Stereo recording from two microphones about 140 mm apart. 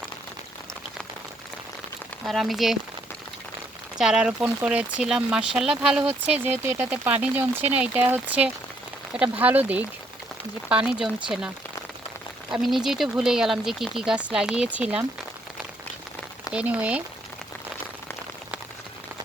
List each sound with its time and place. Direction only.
2.2 s speech: centre (ahead or behind)
3.9 s speech: 5° right (ahead or behind)
16.5 s speech: 10° right (ahead or behind)